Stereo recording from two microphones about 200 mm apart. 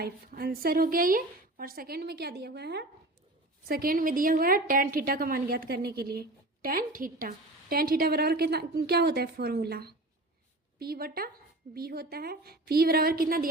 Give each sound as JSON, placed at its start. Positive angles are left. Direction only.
{"t": 0.0, "sound": "a woman's voice", "side_deg": -50}